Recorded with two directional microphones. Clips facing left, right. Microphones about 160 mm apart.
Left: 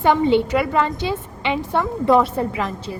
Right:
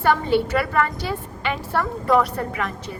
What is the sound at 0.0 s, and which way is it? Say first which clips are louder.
A woman's voice: left 3 dB; 20° left (ahead or behind).